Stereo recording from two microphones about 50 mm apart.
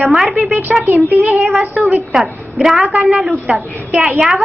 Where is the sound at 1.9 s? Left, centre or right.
Centre.